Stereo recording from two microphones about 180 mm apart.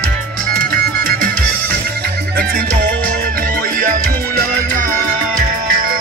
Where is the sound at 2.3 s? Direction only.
55° right (ahead or behind).